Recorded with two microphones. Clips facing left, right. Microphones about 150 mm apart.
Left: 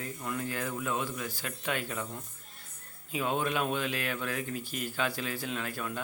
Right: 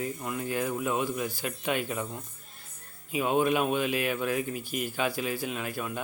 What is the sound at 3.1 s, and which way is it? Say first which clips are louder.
Speech: right 5 dB; 10° right (ahead or behind).